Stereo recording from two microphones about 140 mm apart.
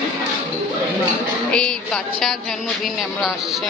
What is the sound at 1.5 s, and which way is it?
Speech, 5° left (ahead or behind).